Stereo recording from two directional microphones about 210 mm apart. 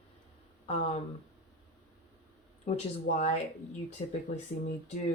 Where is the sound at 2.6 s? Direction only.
30° left (ahead or behind).